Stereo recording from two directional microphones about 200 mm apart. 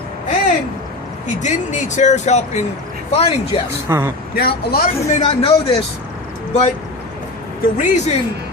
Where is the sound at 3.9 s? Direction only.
10° right (ahead or behind).